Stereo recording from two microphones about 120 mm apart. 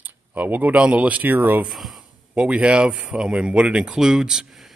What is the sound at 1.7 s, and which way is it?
Speech, centre (ahead or behind).